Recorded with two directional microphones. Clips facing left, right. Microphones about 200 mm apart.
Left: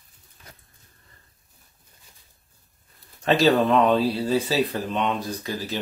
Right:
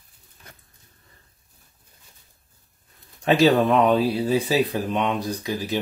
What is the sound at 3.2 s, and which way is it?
Speech, 20° right (ahead or behind).